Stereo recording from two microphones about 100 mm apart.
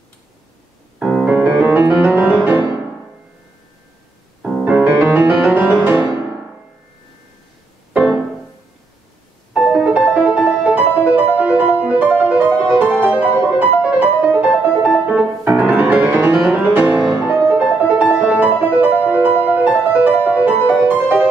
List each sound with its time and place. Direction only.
0.9 s music: 5° right (ahead or behind)
4.4 s music: centre (ahead or behind)
4.6 s music: 15° right (ahead or behind)
9.5 s music: 5° right (ahead or behind)
14.9 s music: 5° right (ahead or behind)
15.4 s music: 15° right (ahead or behind)
16.3 s music: 5° right (ahead or behind)
16.6 s music: 20° right (ahead or behind)